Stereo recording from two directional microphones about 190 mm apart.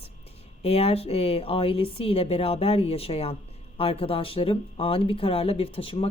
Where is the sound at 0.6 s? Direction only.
30° left (ahead or behind).